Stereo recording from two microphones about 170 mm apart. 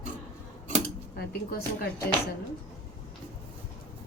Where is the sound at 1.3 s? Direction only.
65° left (ahead or behind).